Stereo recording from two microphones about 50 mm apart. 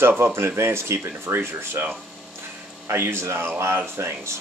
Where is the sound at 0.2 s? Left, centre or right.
Right.